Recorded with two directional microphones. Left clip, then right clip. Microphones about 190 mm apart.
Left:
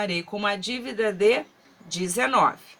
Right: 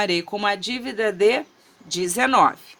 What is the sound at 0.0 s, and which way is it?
Speech, 50° right (ahead or behind).